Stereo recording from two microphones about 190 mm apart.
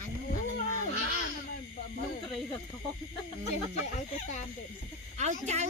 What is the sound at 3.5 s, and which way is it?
Speech, 35° left (ahead or behind).